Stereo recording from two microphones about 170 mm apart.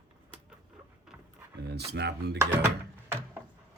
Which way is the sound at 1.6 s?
80° right.